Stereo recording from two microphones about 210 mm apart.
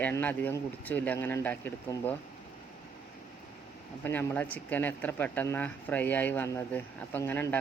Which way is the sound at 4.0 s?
10° left (ahead or behind).